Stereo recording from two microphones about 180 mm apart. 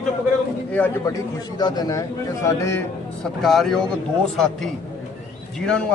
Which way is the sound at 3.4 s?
Centre (ahead or behind).